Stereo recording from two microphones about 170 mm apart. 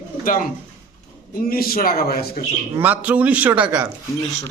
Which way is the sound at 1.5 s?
60° left (ahead or behind).